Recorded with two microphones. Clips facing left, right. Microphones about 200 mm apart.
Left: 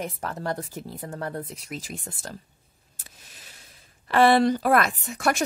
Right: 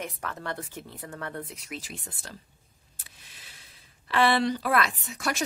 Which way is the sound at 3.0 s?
45° left (ahead or behind).